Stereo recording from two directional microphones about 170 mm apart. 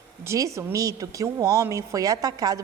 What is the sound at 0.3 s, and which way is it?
Speech, 20° right (ahead or behind).